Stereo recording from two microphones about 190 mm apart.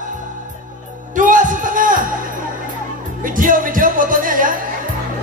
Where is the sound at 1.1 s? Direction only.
45° right (ahead or behind).